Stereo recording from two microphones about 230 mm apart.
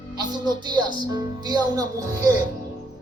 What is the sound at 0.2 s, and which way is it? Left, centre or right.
Speech, centre.